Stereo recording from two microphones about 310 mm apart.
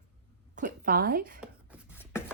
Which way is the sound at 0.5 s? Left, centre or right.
Right.